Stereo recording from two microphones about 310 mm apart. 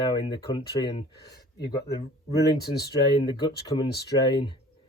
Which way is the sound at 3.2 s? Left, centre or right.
Centre.